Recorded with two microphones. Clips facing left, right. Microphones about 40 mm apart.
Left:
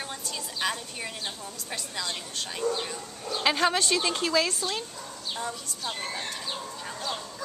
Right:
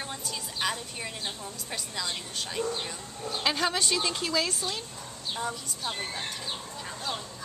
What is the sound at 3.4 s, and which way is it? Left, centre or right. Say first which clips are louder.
A woman's voice: left 4 dB; centre.